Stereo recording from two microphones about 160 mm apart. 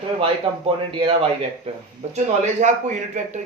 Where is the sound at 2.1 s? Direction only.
50° right (ahead or behind).